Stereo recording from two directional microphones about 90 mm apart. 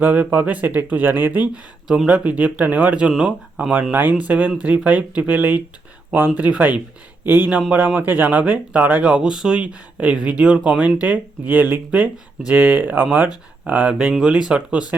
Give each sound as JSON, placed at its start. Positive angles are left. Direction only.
{"t": 0.0, "sound": "speech", "side_deg": -20}
{"t": 1.9, "sound": "speech", "side_deg": -10}